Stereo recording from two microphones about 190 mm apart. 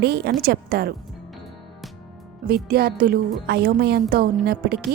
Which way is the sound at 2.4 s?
55° right (ahead or behind).